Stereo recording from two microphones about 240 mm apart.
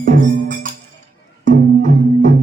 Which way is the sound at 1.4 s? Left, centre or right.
Right.